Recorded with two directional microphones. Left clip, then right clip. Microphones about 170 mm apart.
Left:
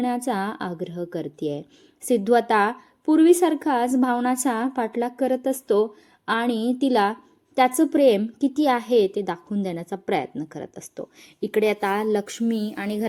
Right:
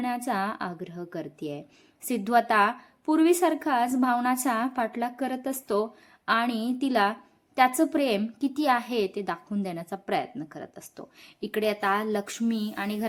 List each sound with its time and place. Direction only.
0.0 s a woman's voice: 25° left (ahead or behind)